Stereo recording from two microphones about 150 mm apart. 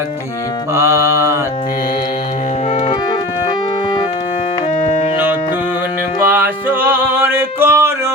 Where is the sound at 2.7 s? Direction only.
45° left (ahead or behind).